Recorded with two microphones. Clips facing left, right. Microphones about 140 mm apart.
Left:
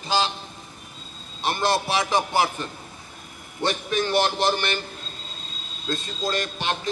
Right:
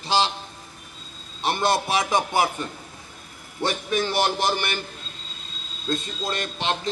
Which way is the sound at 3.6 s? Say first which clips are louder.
Even; 10° right (ahead or behind).